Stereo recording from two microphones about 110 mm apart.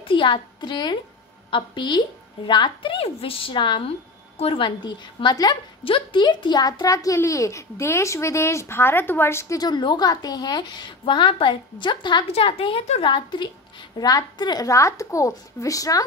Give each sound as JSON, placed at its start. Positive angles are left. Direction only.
{"t": 0.1, "sound": "a woman's voice", "side_deg": 50}
{"t": 4.4, "sound": "a woman's voice", "side_deg": 55}
{"t": 5.9, "sound": "a child's voice", "side_deg": 50}
{"t": 9.6, "sound": "a woman's voice", "side_deg": 40}
{"t": 12.3, "sound": "a woman's voice", "side_deg": 60}
{"t": 13.0, "sound": "a woman's voice", "side_deg": 45}